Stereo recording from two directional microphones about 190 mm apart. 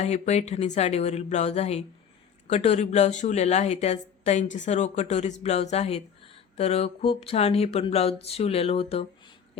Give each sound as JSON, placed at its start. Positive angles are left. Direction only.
{"t": 0.0, "sound": "speech", "side_deg": 35}